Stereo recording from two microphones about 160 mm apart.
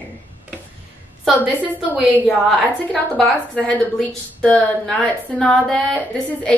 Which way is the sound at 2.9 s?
5° left (ahead or behind).